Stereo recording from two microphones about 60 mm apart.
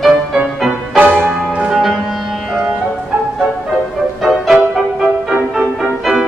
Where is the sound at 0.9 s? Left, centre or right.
Right.